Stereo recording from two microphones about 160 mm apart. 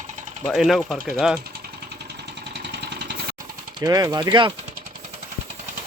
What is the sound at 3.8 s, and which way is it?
Speech, 25° right (ahead or behind).